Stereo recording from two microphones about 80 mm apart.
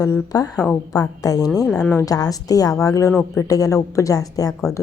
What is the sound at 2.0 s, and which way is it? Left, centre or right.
A woman's voice, left.